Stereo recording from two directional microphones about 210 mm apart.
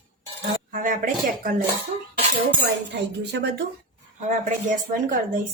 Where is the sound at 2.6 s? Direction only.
55° right (ahead or behind).